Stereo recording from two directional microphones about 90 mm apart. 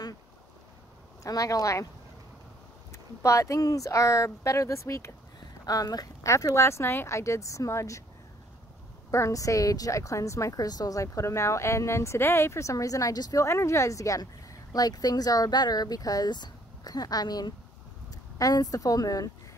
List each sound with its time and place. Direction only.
1.2 s a woman's voice: 40° left (ahead or behind)
2.9 s a woman's voice: 35° left (ahead or behind)
5.7 s speech: 45° left (ahead or behind)
6.3 s a woman's voice: 30° left (ahead or behind)
9.1 s a woman's voice: 35° left (ahead or behind)